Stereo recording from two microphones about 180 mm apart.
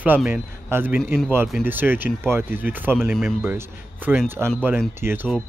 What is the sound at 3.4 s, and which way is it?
Speech, 10° right (ahead or behind).